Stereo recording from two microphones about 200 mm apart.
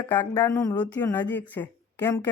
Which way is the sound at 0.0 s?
10° left (ahead or behind).